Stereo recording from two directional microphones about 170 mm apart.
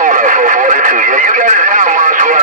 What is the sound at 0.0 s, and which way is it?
Radio, 50° right (ahead or behind).